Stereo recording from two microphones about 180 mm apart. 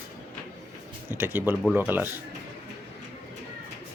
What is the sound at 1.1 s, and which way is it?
Speech, 10° right (ahead or behind).